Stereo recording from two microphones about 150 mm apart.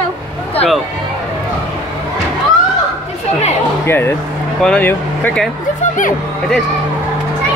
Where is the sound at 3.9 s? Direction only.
15° left (ahead or behind).